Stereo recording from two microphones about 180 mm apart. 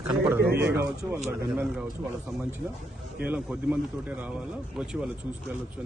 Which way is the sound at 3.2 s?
10° right (ahead or behind).